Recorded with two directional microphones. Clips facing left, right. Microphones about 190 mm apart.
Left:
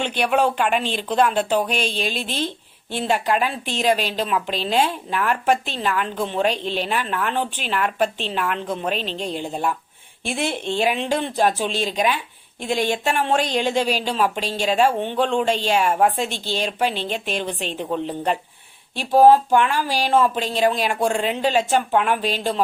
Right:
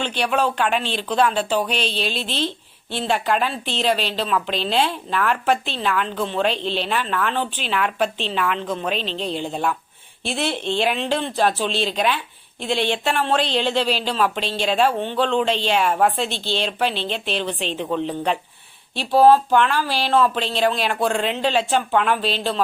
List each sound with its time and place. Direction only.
0.2 s a woman's voice: 10° left (ahead or behind)
2.1 s a woman's voice: 50° left (ahead or behind)
2.9 s a woman's voice: 10° left (ahead or behind)
12.5 s speech: 45° left (ahead or behind)
12.9 s a woman's voice: 10° left (ahead or behind)